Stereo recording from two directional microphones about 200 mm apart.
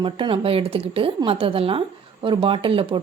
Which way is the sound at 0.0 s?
25° right (ahead or behind).